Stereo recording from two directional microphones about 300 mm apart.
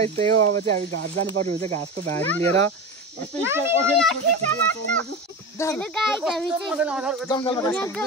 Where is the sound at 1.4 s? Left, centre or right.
Centre.